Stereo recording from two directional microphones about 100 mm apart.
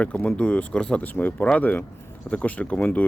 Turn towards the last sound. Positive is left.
turn(degrees=15)  # may be behind; listen again after turning